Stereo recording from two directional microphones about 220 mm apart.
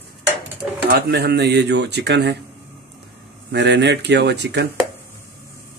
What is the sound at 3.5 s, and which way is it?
Speech, 50° right (ahead or behind).